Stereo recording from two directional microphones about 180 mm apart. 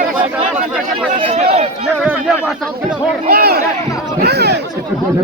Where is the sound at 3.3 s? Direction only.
60° right (ahead or behind).